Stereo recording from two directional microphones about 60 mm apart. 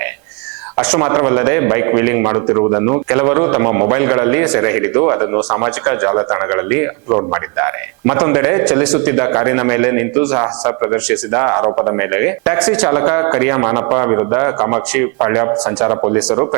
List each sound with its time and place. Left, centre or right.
0.9 s a man's voice: right
7.1 s speech: right
7.3 s a man's voice: right
10.7 s speech: right
11.9 s a man's voice: right
12.5 s speech: centre
12.9 s speech: right